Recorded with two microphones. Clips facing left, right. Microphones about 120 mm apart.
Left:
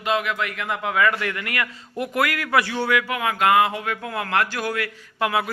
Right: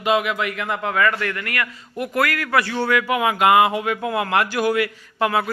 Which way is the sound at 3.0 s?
10° right (ahead or behind).